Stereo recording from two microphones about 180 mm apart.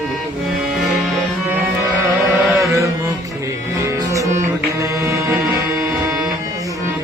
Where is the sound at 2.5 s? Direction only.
15° right (ahead or behind).